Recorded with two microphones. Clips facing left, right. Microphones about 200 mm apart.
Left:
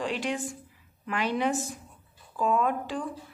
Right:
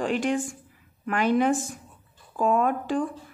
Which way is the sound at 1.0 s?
50° right (ahead or behind).